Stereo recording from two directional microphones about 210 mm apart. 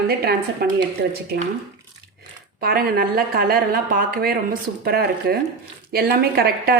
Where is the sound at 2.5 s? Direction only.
45° right (ahead or behind).